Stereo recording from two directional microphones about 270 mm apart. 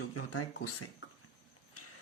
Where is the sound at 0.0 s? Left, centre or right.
Left.